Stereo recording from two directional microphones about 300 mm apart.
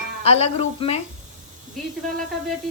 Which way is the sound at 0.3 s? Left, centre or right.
Left.